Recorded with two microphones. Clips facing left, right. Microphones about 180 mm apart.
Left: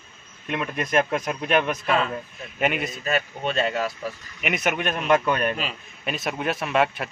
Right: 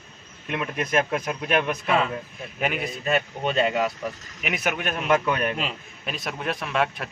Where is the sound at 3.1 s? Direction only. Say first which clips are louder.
Right 2 dB; 15° right (ahead or behind).